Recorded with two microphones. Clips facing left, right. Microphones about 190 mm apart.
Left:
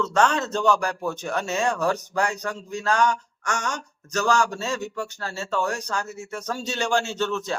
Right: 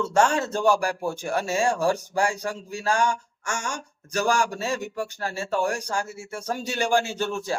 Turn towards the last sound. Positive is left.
turn(degrees=-10)  # may be behind; listen again after turning